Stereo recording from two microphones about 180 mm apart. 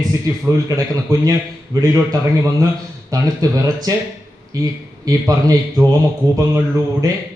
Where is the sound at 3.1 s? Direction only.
20° right (ahead or behind).